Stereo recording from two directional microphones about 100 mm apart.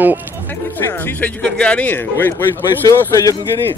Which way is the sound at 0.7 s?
20° left (ahead or behind).